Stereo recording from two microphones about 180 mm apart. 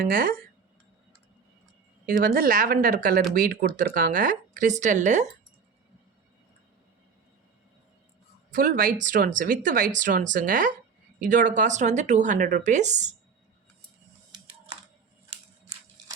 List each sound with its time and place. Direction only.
0.0 s speech: 50° right (ahead or behind)
2.0 s speech: 50° right (ahead or behind)
8.5 s speech: 50° right (ahead or behind)